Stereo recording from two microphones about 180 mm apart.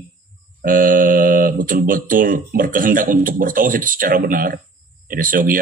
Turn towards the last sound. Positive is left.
turn(degrees=-50)  # may be behind; listen again after turning